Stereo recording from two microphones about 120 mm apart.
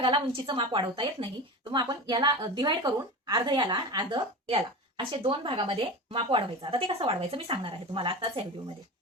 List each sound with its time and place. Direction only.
0.0 s a woman's voice: 45° right (ahead or behind)